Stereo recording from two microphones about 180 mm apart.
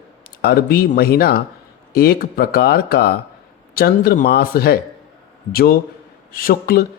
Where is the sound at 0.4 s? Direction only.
60° left (ahead or behind).